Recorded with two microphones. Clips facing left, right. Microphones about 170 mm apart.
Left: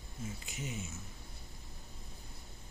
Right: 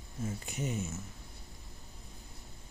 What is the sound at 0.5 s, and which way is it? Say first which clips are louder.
Mantra: right 7 dB; 40° right (ahead or behind).